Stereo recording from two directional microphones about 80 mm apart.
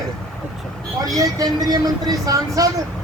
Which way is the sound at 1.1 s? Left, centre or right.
Right.